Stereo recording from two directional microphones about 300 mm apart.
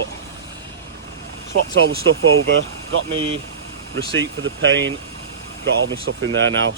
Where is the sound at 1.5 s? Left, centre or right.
Right.